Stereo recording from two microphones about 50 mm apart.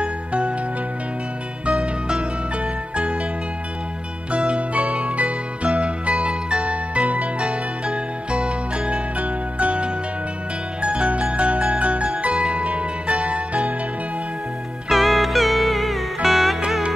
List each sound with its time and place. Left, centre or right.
0.0 s music: right
1.7 s music: centre
4.3 s music: right
14.9 s music: centre